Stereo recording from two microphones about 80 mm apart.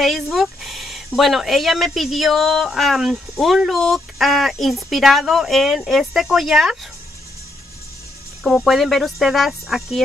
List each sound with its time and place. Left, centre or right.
0.0 s speech: centre
8.5 s speech: centre